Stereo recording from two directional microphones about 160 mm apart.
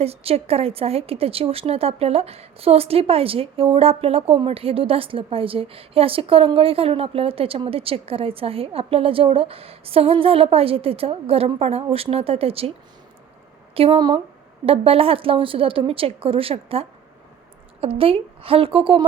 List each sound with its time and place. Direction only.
0.0 s a woman's voice: 40° right (ahead or behind)
13.7 s a woman's voice: 35° right (ahead or behind)